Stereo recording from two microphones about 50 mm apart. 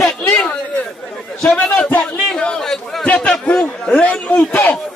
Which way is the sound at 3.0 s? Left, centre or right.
Left.